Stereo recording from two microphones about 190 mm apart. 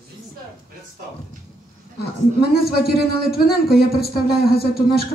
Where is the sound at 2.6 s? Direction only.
55° left (ahead or behind).